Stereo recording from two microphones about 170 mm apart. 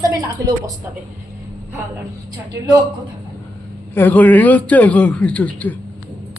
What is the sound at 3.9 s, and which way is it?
A man's voice, 10° left (ahead or behind).